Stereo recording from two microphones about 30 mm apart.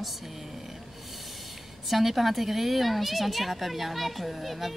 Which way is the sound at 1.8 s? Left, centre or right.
Centre.